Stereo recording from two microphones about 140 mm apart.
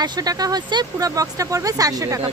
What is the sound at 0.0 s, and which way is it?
Speech, 25° right (ahead or behind).